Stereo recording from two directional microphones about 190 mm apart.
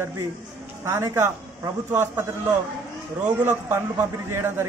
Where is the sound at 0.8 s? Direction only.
15° right (ahead or behind).